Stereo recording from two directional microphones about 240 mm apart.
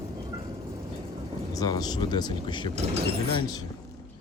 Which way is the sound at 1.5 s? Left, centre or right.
Centre.